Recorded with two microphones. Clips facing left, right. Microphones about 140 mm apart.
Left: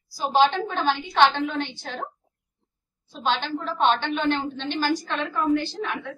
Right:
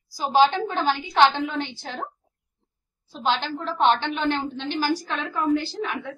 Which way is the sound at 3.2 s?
10° right (ahead or behind).